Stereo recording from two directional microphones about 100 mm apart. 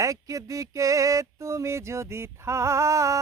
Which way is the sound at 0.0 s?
35° right (ahead or behind).